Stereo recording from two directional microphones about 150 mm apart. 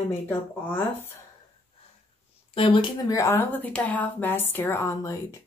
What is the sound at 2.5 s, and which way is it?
Speech, 35° left (ahead or behind).